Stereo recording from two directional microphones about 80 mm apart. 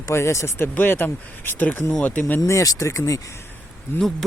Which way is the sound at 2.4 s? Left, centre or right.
Left.